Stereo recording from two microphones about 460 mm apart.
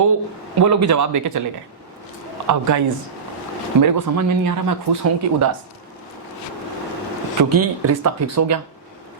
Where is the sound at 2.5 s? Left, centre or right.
Right.